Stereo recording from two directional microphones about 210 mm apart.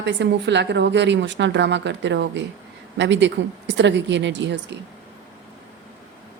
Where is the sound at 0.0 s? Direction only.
55° right (ahead or behind).